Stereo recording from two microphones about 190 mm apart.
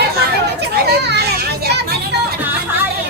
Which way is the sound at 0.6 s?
60° right (ahead or behind).